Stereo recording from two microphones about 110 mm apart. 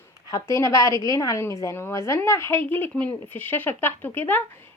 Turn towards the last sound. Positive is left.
turn(degrees=20)  # may be behind; listen again after turning